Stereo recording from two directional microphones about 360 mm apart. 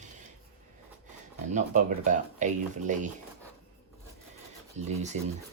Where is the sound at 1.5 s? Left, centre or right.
Right.